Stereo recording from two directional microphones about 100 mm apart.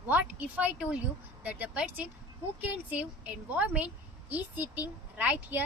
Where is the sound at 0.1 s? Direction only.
15° right (ahead or behind).